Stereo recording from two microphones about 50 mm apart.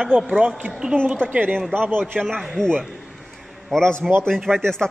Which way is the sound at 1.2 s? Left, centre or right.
Right.